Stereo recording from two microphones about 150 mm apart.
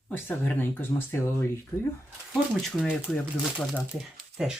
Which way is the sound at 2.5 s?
5° right (ahead or behind).